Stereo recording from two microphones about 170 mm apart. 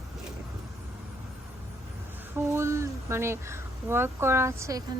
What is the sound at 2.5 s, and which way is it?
Speech, 15° right (ahead or behind).